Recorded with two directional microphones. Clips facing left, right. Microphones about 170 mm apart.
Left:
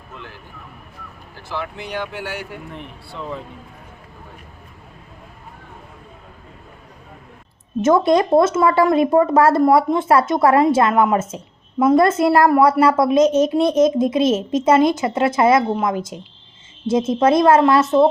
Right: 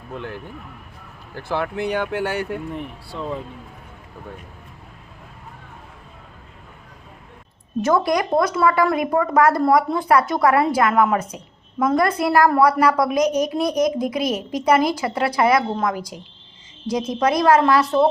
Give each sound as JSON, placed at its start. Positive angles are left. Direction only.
{"t": 0.1, "sound": "speech", "side_deg": -55}
{"t": 1.4, "sound": "speech", "side_deg": -55}
{"t": 7.8, "sound": "a woman's voice", "side_deg": 20}